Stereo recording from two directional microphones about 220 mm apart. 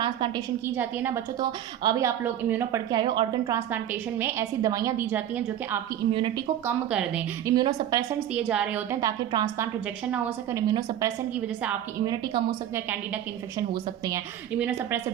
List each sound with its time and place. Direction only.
0.0 s a woman's voice: 20° right (ahead or behind)
6.1 s a woman's voice: 25° right (ahead or behind)
6.7 s a woman's voice: 10° right (ahead or behind)
7.5 s a woman's voice: 20° right (ahead or behind)
8.3 s a woman's voice: 5° right (ahead or behind)